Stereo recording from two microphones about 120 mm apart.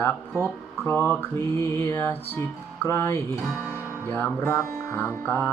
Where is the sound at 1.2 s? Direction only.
20° left (ahead or behind).